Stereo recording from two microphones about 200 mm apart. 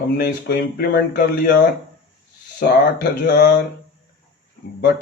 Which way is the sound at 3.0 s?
55° left (ahead or behind).